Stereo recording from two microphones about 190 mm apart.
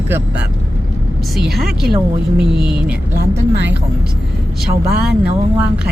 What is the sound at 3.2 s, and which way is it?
Speech, 65° right (ahead or behind).